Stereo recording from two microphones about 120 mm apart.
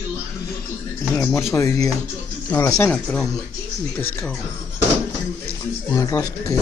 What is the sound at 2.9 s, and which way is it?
Speech, 5° left (ahead or behind).